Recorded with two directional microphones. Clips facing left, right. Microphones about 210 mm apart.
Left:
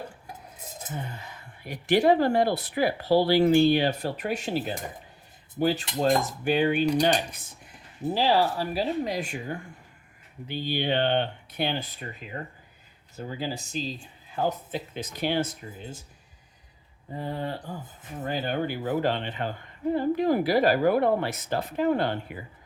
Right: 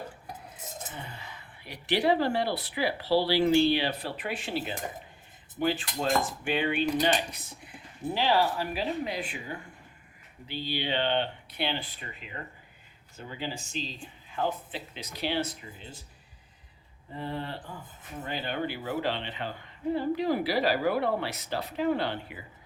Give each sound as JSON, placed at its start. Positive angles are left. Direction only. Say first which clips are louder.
{"t": 0.9, "sound": "speech", "louder": "left 5 dB", "side_deg": 45}
{"t": 17.2, "sound": "speech", "louder": "left 3 dB", "side_deg": 40}